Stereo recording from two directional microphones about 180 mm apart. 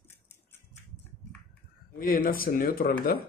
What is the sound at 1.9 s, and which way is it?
Speech, 55° left (ahead or behind).